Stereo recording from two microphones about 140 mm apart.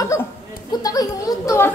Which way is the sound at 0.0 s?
25° left (ahead or behind).